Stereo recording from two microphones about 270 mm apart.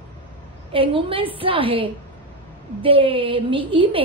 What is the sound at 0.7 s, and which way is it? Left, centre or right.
A woman's voice, centre.